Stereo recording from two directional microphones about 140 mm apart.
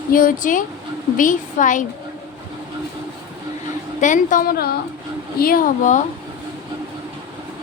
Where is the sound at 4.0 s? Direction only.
65° left (ahead or behind).